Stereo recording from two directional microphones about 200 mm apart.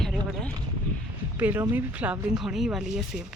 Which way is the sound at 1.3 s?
10° right (ahead or behind).